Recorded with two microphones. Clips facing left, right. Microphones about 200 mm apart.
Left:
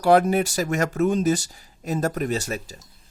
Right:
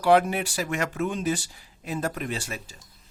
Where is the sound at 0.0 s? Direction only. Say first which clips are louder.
Left 3 dB; 40° left (ahead or behind).